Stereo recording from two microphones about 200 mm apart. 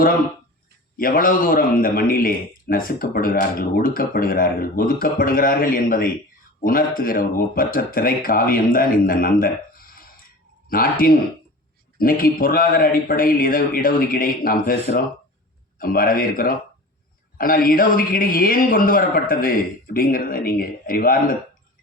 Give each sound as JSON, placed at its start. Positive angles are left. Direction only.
{"t": 0.9, "sound": "a man's voice", "side_deg": 45}
{"t": 9.9, "sound": "a sound", "side_deg": 45}
{"t": 10.7, "sound": "a man's voice", "side_deg": 45}